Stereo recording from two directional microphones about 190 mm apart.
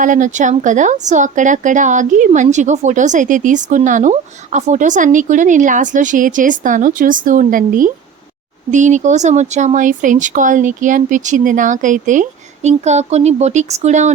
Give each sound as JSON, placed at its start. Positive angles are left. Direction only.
{"t": 0.0, "sound": "speech", "side_deg": -40}